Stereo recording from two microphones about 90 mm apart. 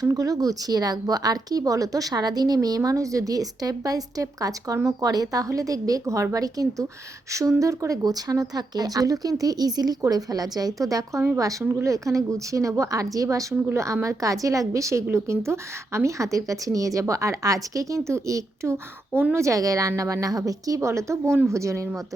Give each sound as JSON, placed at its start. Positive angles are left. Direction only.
{"t": 0.0, "sound": "speech", "side_deg": -40}